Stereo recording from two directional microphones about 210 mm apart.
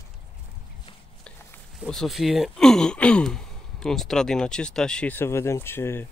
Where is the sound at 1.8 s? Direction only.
Centre (ahead or behind).